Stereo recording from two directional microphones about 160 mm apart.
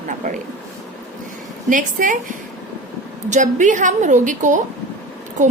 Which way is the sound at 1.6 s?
55° right (ahead or behind).